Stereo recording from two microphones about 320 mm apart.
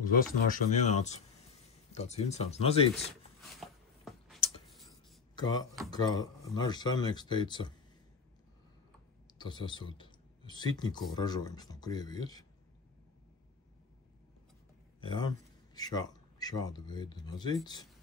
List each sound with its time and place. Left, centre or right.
0.0 s speech: left
3.3 s a sound: centre
4.6 s tick-tock: centre
5.3 s speech: centre
9.3 s speech: centre
15.0 s speech: centre